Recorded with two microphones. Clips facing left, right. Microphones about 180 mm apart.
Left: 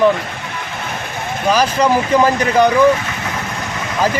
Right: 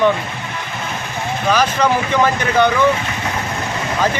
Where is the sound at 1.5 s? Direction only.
35° left (ahead or behind).